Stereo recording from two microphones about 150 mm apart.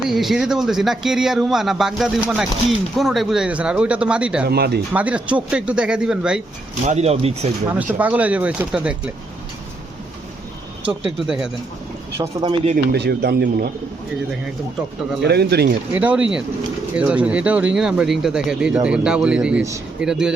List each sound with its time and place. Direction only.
0.1 s speech: centre (ahead or behind)
4.4 s speech: 90° right
4.9 s speech: 10° right (ahead or behind)
6.8 s speech: 45° right (ahead or behind)
7.7 s speech: 10° right (ahead or behind)
10.8 s speech: 5° right (ahead or behind)
12.4 s speech: 40° right (ahead or behind)
12.7 s speech: 90° right
15.2 s speech: 90° right
15.9 s speech: 10° right (ahead or behind)